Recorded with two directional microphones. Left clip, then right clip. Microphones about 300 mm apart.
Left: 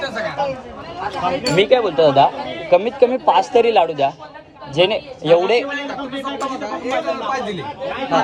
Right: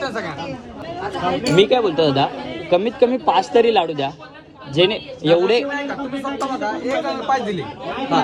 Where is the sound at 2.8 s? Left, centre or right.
Right.